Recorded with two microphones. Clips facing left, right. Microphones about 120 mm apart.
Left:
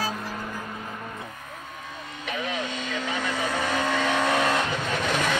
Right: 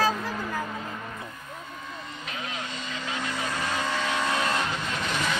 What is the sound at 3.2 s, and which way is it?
Vehicle, 60° left (ahead or behind).